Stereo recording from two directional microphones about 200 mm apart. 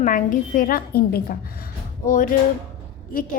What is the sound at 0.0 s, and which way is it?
A woman's voice, 40° left (ahead or behind).